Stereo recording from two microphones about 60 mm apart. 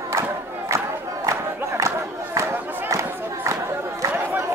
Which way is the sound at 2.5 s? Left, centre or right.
Right.